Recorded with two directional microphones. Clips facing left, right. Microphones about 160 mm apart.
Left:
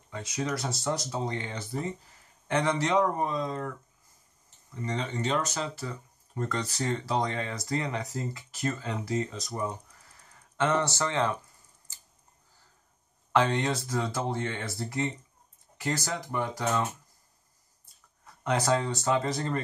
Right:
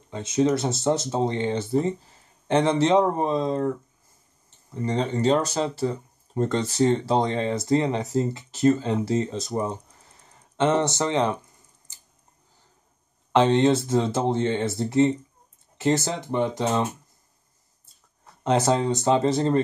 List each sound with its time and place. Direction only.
0.1 s speech: 25° right (ahead or behind)
13.3 s speech: 25° right (ahead or behind)
18.4 s speech: 25° right (ahead or behind)